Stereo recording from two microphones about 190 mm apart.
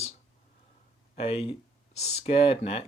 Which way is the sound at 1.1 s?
30° left (ahead or behind).